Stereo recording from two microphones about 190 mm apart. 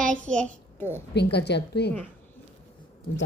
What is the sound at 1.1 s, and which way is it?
Speech, 60° left (ahead or behind).